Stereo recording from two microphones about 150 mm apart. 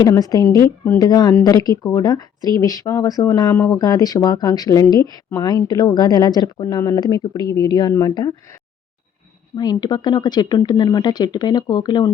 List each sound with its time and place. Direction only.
0.0 s speech: 25° left (ahead or behind)
9.6 s speech: 30° left (ahead or behind)